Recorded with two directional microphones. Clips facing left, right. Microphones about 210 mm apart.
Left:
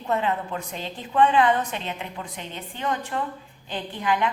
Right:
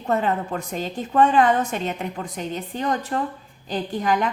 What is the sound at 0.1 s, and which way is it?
A woman's voice, 45° right (ahead or behind).